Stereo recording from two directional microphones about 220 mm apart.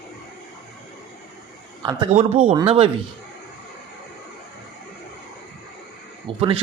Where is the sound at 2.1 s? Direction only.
25° right (ahead or behind).